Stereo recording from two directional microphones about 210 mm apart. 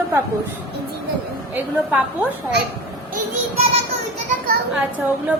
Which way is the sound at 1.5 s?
5° right (ahead or behind).